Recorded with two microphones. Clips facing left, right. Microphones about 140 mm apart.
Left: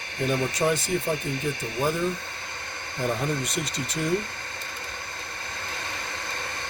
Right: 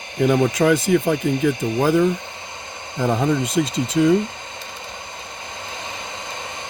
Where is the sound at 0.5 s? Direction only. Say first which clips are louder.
Right 8 dB; 90° right.